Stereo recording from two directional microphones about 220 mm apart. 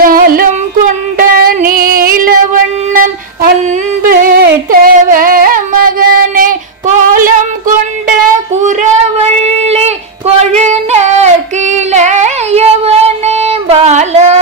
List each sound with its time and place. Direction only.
0.0 s music: 40° right (ahead or behind)
4.0 s singing: 40° right (ahead or behind)
9.2 s female singing: 30° right (ahead or behind)
11.7 s a sound: 30° right (ahead or behind)